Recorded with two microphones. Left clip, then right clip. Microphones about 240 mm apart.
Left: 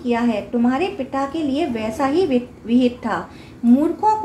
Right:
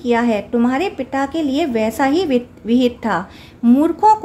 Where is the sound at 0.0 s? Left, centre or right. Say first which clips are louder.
Right 4 dB; right.